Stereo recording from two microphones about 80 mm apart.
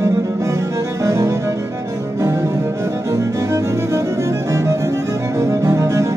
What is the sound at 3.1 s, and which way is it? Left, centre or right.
Music, right.